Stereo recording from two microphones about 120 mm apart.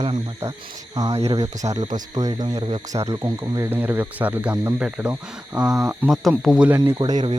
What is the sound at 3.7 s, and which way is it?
Speech, 15° right (ahead or behind).